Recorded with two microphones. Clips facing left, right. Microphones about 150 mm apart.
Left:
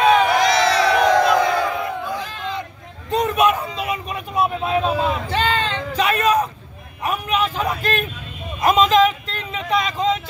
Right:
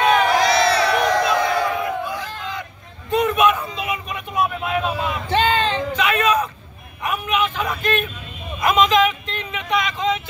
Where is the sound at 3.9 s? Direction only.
35° left (ahead or behind).